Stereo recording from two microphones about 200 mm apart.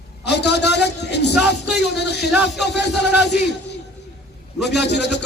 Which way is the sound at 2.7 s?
55° left (ahead or behind).